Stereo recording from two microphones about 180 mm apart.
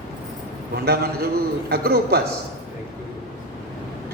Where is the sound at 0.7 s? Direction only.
60° right (ahead or behind).